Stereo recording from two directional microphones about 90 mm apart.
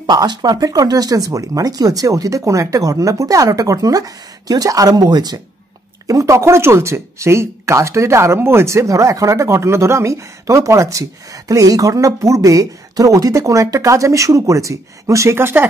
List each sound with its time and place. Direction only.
0.0 s speech: 50° right (ahead or behind)
6.0 s speech: 35° right (ahead or behind)